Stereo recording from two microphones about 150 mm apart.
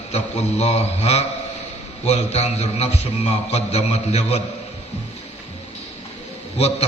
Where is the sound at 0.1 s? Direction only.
45° left (ahead or behind).